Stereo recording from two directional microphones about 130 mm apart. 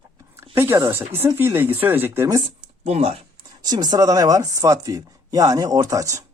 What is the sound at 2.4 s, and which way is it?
Speech, 50° right (ahead or behind).